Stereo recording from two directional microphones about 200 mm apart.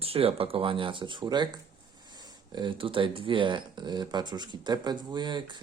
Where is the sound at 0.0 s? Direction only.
30° right (ahead or behind).